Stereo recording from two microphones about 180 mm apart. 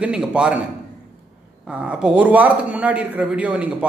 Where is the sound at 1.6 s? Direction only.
5° right (ahead or behind).